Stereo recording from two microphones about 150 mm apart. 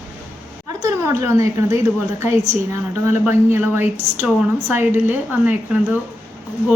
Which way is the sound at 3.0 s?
15° right (ahead or behind).